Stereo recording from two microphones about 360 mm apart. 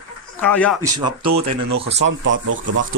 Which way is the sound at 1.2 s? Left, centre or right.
Right.